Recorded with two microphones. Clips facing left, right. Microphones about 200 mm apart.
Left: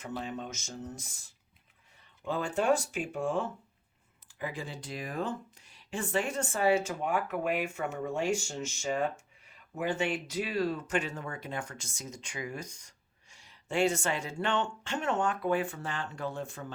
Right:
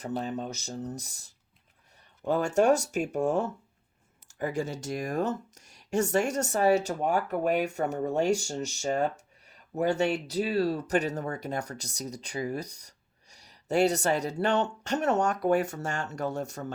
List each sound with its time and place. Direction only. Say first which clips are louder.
0.0 s speech: right 5 dB; 40° right (ahead or behind)